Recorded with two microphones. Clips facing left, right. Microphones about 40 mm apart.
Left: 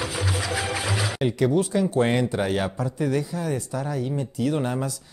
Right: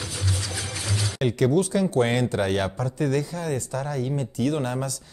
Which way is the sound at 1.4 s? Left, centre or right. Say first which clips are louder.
Right 1 dB; centre.